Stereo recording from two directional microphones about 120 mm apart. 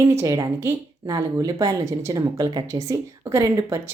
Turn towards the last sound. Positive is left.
turn(degrees=-20)  # may be behind; listen again after turning